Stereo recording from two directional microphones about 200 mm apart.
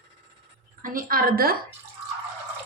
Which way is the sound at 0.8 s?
45° right (ahead or behind).